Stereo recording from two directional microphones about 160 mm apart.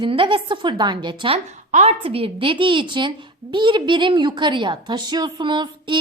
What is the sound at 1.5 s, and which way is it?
A woman's voice, 45° right (ahead or behind).